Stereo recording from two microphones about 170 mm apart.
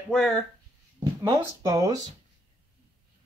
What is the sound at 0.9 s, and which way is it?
Speech, 25° right (ahead or behind).